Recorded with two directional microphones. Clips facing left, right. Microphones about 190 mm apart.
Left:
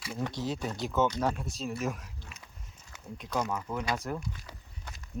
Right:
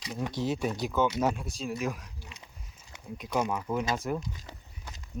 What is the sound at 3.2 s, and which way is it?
Speech, 10° right (ahead or behind).